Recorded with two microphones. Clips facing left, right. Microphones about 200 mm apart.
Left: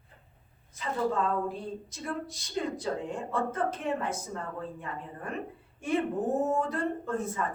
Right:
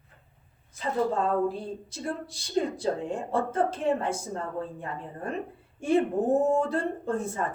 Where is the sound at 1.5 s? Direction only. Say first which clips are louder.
Right 2 dB; 30° right (ahead or behind).